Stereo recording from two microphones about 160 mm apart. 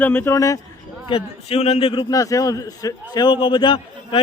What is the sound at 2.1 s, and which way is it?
A man's voice, 20° left (ahead or behind).